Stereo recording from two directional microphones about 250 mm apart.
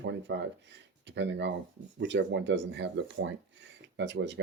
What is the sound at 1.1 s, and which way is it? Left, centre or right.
Speech, right.